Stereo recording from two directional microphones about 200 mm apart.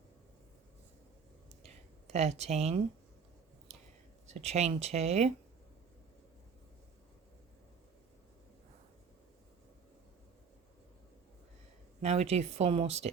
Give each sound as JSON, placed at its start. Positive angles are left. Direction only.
{"t": 2.1, "sound": "speech", "side_deg": -35}
{"t": 4.3, "sound": "speech", "side_deg": -35}
{"t": 12.0, "sound": "speech", "side_deg": -30}